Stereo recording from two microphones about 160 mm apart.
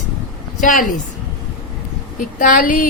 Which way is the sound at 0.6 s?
55° left (ahead or behind).